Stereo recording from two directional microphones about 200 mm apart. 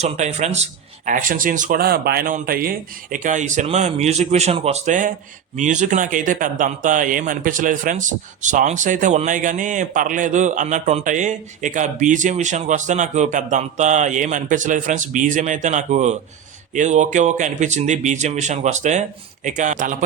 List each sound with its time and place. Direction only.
0.0 s a man's voice: 35° right (ahead or behind)